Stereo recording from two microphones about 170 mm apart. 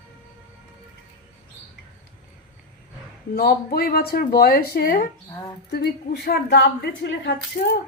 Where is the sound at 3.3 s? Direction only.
65° left (ahead or behind).